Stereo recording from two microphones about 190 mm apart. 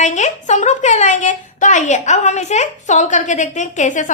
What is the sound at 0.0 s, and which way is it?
A woman's voice, 40° left (ahead or behind).